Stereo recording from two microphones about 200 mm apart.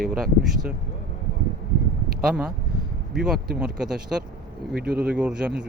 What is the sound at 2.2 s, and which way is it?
A man's voice, 5° right (ahead or behind).